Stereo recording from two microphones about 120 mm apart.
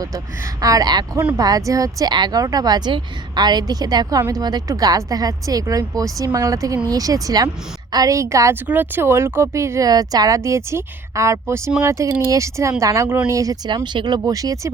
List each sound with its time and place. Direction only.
0.6 s speech: 30° right (ahead or behind)
13.7 s speech: 40° right (ahead or behind)